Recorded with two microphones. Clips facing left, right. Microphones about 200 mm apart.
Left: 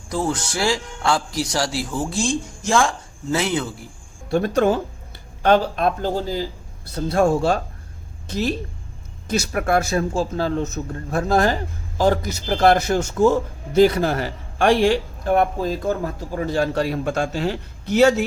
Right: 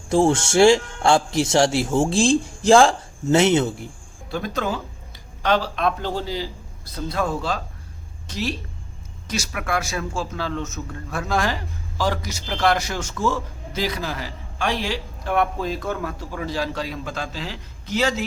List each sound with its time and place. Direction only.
0.1 s a man's voice: 25° right (ahead or behind)
4.4 s a man's voice: 55° left (ahead or behind)
9.5 s a man's voice: 40° left (ahead or behind)
13.8 s a man's voice: 55° left (ahead or behind)
15.3 s a man's voice: 40° left (ahead or behind)
16.5 s a man's voice: 55° left (ahead or behind)